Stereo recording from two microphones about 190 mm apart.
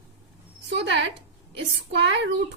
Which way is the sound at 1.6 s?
70° right (ahead or behind).